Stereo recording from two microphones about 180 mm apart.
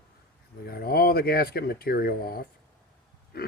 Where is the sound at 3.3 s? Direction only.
60° left (ahead or behind).